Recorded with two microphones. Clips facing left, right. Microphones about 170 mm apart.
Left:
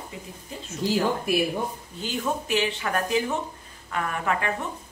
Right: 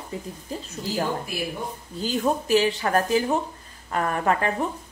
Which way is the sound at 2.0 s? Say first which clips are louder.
Right 4 dB; 35° right (ahead or behind).